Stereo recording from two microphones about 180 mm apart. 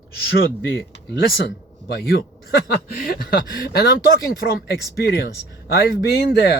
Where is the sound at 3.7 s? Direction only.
70° left (ahead or behind).